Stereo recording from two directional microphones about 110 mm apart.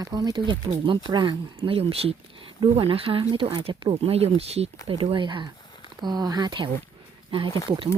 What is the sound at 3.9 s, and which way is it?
Speech, 70° right (ahead or behind).